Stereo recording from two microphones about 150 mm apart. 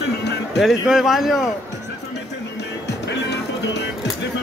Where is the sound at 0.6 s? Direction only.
Centre (ahead or behind).